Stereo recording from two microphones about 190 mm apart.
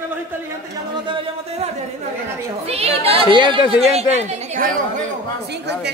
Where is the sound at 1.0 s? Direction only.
30° right (ahead or behind).